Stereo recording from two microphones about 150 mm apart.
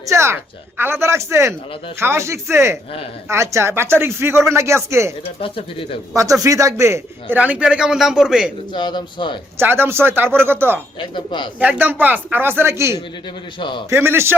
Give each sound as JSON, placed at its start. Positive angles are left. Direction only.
{"t": 0.0, "sound": "a man's voice", "side_deg": -20}
{"t": 5.4, "sound": "speech", "side_deg": 35}
{"t": 6.4, "sound": "a man's voice", "side_deg": -20}
{"t": 8.7, "sound": "speech", "side_deg": 30}
{"t": 9.6, "sound": "a man's voice", "side_deg": -15}
{"t": 11.1, "sound": "speech", "side_deg": 30}
{"t": 11.8, "sound": "a man's voice", "side_deg": -10}
{"t": 13.6, "sound": "speech", "side_deg": 30}
{"t": 13.9, "sound": "a man's voice", "side_deg": -15}